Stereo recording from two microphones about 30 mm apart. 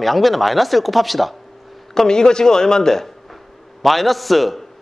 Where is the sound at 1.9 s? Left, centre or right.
Left.